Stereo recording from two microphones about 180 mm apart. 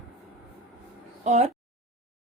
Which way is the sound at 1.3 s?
40° right (ahead or behind).